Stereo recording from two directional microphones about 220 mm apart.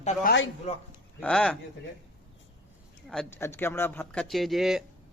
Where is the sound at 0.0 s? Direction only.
30° left (ahead or behind).